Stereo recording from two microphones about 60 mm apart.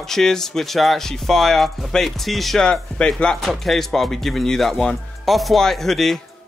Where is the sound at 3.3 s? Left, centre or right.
Centre.